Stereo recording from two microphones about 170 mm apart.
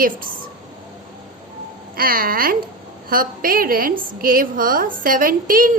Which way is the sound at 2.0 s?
60° right (ahead or behind).